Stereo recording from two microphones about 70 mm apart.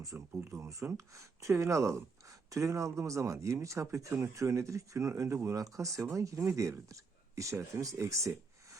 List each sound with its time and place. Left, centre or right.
0.1 s speech: right
0.4 s speech: right